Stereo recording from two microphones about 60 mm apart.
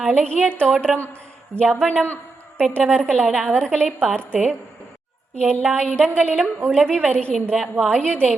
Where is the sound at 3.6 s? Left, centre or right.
Centre.